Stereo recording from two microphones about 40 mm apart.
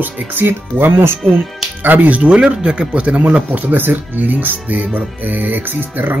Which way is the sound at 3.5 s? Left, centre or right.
Right.